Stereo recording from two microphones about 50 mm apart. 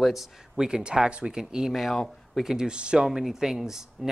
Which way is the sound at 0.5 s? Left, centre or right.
Centre.